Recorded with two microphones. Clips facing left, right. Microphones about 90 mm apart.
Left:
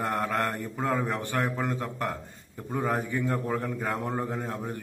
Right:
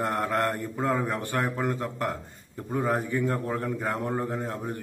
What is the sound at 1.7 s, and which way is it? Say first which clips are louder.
A man's voice: right 1 dB; centre (ahead or behind).